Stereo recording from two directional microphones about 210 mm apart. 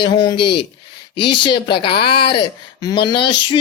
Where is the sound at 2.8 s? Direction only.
20° left (ahead or behind).